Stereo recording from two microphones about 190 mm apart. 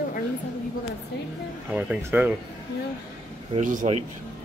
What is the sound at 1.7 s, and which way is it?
Speech, 10° right (ahead or behind).